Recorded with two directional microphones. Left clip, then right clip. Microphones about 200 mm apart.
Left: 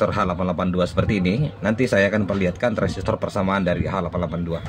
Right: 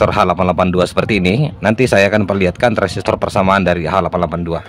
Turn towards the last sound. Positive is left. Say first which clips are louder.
# right 9 dB
turn(degrees=-50)  # may be behind; listen again after turning